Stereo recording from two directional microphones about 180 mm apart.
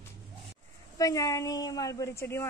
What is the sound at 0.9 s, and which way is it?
A woman's voice, 20° left (ahead or behind).